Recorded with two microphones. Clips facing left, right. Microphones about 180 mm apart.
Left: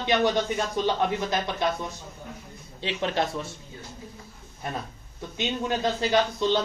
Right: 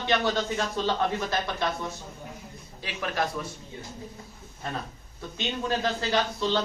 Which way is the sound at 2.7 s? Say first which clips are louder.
Left 3 dB; 25° left (ahead or behind).